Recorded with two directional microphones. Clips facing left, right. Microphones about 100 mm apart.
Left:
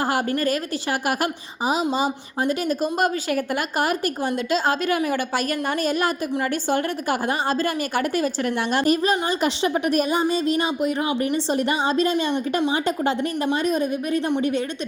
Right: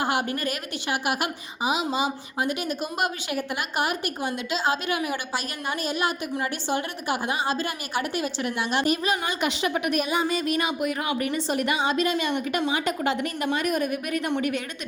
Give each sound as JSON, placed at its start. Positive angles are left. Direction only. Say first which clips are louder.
{"t": 0.0, "sound": "a woman's voice", "louder": "left 4 dB", "side_deg": 40}